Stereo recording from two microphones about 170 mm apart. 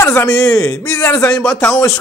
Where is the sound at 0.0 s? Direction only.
15° left (ahead or behind).